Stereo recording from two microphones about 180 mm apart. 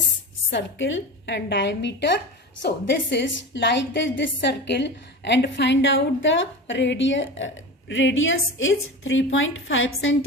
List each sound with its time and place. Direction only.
0.5 s a woman's voice: 90° left